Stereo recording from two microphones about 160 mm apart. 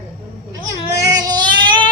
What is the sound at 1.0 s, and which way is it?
Child singing, 25° right (ahead or behind).